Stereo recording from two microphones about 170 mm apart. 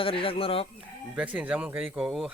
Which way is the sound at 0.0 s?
30° left (ahead or behind).